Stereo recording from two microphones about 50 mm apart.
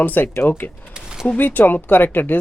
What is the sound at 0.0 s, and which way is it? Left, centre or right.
Speech, left.